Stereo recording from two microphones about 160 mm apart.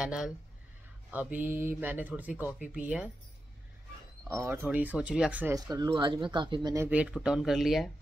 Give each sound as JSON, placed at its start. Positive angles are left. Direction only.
{"t": 0.0, "sound": "speech", "side_deg": -5}
{"t": 1.3, "sound": "speech", "side_deg": -10}
{"t": 4.3, "sound": "speech", "side_deg": -15}
{"t": 5.5, "sound": "speech", "side_deg": -25}
{"t": 6.9, "sound": "speech", "side_deg": -10}